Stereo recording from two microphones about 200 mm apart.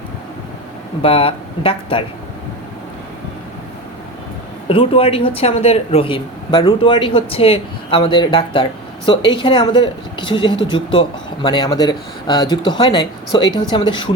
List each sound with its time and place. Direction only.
1.0 s speech: 30° left (ahead or behind)
4.7 s speech: 25° left (ahead or behind)